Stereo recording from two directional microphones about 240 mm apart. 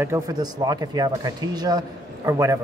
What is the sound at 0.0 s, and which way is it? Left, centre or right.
Speech, centre.